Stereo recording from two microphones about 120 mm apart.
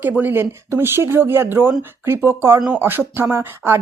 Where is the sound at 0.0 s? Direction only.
15° right (ahead or behind).